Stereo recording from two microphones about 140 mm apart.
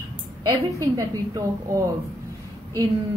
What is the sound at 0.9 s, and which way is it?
A woman's voice, 25° right (ahead or behind).